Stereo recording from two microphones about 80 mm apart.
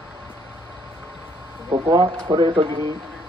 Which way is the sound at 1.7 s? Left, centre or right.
Right.